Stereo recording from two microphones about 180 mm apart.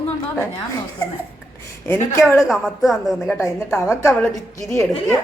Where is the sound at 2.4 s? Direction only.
Centre (ahead or behind).